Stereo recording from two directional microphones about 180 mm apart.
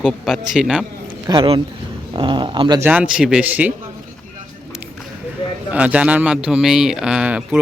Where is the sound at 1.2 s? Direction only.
30° right (ahead or behind).